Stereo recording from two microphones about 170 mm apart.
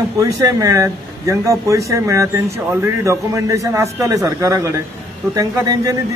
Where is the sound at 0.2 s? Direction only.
20° right (ahead or behind).